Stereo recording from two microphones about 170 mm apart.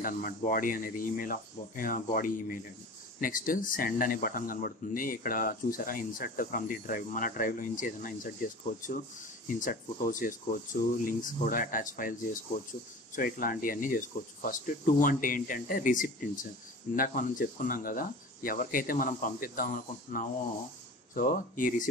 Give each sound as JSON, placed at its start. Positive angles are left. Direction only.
{"t": 0.0, "sound": "speech", "side_deg": 55}
{"t": 9.5, "sound": "speech", "side_deg": 50}